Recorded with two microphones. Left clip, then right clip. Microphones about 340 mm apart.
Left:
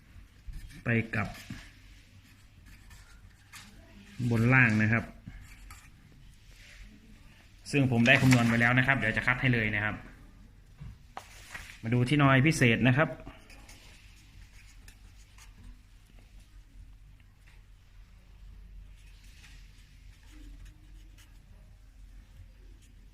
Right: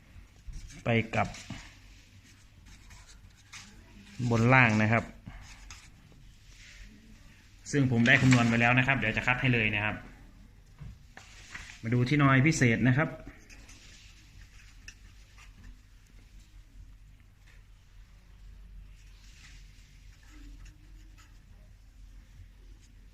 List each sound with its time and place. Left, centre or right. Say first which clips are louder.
0.8 s speech: right 2 dB; right
4.3 s speech: right 2 dB; right
7.6 s speech: left 1 dB; centre
11.8 s speech: left 1 dB; centre